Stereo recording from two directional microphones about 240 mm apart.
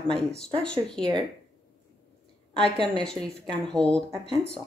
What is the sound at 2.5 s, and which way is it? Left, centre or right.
A woman's voice, centre.